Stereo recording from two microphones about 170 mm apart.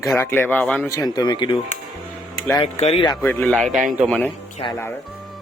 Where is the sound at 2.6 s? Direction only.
35° left (ahead or behind).